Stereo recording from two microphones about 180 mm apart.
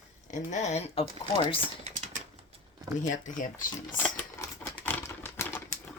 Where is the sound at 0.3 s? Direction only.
40° left (ahead or behind).